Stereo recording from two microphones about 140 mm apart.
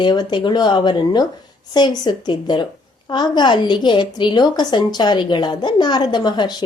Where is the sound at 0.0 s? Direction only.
35° left (ahead or behind).